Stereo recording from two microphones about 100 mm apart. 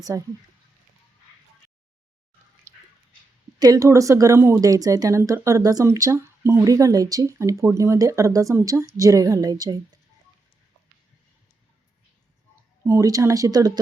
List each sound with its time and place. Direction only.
0.0 s a woman's voice: 35° right (ahead or behind)
2.7 s dog: 30° right (ahead or behind)
3.6 s a woman's voice: 35° right (ahead or behind)
12.8 s a woman's voice: 30° right (ahead or behind)